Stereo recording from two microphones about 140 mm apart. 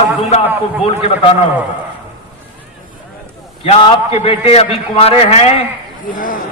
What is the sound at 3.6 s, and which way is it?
A man's voice, 40° left (ahead or behind).